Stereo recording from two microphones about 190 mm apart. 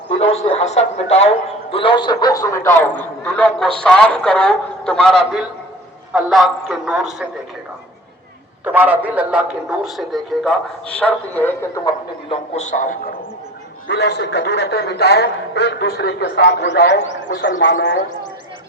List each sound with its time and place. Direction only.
0.2 s a man's voice: 35° left (ahead or behind); by 5.1 s 5° left (ahead or behind)
6.1 s a man's voice: centre (ahead or behind)
8.6 s a man's voice: 10° right (ahead or behind); by 11.9 s 15° left (ahead or behind)
12.3 s a man's voice: 40° left (ahead or behind)
13.8 s a man's voice: 60° left (ahead or behind)